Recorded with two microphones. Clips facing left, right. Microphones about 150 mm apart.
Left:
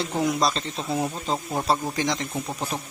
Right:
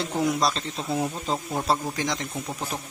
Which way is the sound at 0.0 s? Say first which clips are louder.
Left 1 dB; centre (ahead or behind).